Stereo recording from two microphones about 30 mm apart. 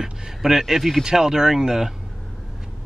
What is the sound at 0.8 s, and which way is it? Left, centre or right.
Speech, centre.